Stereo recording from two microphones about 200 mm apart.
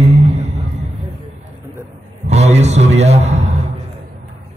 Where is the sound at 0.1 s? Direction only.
30° right (ahead or behind).